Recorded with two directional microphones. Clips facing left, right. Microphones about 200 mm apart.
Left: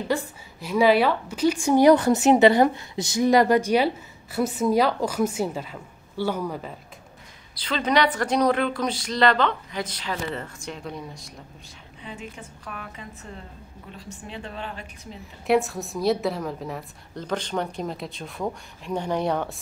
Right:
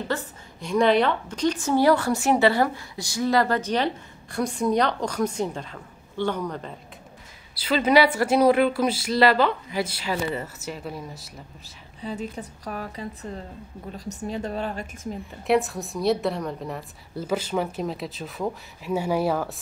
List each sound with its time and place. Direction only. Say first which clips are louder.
0.1 s a woman's voice: left 3 dB; 5° left (ahead or behind)
7.5 s speech: right 4 dB; 5° right (ahead or behind)
12.0 s a woman's voice: right 7 dB; 35° right (ahead or behind)
15.4 s a woman's voice: left 1 dB; centre (ahead or behind)